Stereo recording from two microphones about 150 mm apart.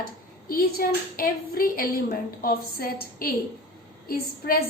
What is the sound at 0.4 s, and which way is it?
A woman's voice, 80° left.